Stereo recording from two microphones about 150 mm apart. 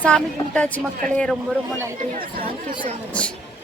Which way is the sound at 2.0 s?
70° right (ahead or behind).